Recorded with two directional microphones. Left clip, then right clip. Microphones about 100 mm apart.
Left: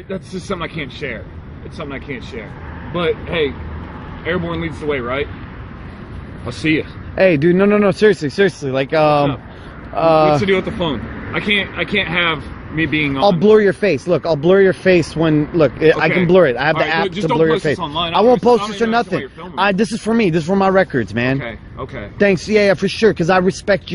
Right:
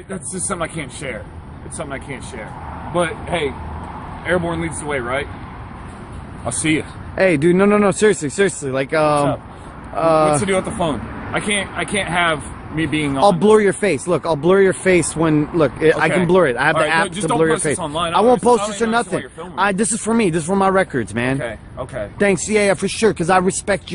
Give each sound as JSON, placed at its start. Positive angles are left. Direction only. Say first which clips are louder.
{"t": 0.5, "sound": "speech", "louder": "even", "side_deg": -55}
{"t": 6.6, "sound": "speech", "louder": "left 2 dB", "side_deg": -65}
{"t": 7.2, "sound": "a man's voice", "louder": "left 2 dB", "side_deg": -10}
{"t": 10.5, "sound": "speech", "louder": "left 2 dB", "side_deg": -60}
{"t": 13.2, "sound": "a man's voice", "louder": "left 1 dB", "side_deg": -15}
{"t": 17.7, "sound": "speech", "louder": "left 1 dB", "side_deg": -60}
{"t": 18.1, "sound": "a man's voice", "louder": "left 2 dB", "side_deg": 0}